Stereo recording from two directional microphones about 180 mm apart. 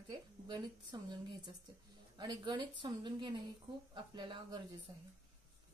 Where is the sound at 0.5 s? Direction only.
25° right (ahead or behind).